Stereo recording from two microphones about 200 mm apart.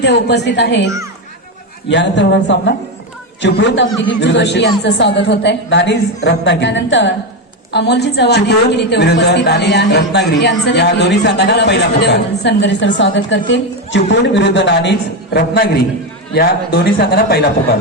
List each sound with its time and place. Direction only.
0.0 s a woman's voice: 60° left (ahead or behind)
1.9 s a woman's voice: 60° left (ahead or behind)